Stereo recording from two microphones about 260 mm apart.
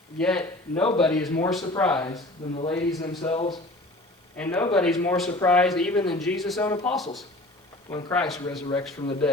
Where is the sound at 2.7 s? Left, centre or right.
Centre.